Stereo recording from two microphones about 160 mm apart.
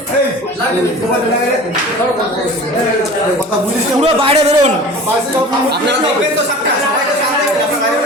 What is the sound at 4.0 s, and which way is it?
Speech, 45° right (ahead or behind).